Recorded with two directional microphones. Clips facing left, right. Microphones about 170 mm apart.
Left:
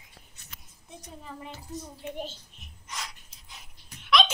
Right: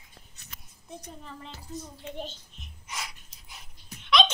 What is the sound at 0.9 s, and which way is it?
A woman's voice, 5° left (ahead or behind).